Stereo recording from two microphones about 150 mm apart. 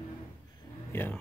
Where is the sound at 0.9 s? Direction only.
15° left (ahead or behind).